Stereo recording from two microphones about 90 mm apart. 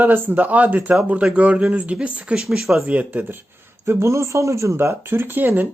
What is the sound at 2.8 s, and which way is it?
Speech, 15° right (ahead or behind).